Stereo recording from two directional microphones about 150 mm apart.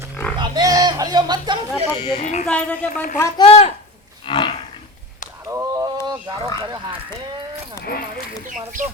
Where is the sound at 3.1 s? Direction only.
20° left (ahead or behind).